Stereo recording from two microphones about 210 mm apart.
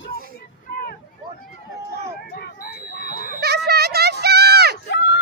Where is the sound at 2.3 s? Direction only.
45° left (ahead or behind).